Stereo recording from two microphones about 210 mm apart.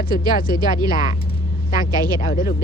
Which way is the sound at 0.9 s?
40° left (ahead or behind).